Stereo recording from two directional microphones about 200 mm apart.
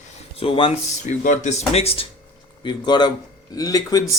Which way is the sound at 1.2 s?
40° left (ahead or behind).